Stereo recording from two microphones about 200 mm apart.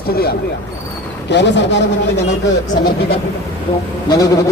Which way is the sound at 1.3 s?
60° left (ahead or behind).